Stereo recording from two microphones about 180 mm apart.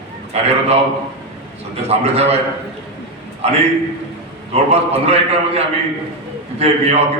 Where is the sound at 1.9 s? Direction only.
35° right (ahead or behind).